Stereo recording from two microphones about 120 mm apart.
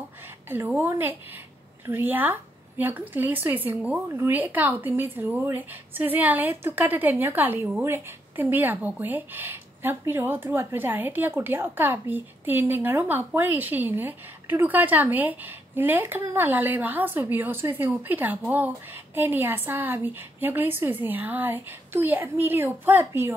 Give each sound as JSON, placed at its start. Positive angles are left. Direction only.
{"t": 0.5, "sound": "speech", "side_deg": -15}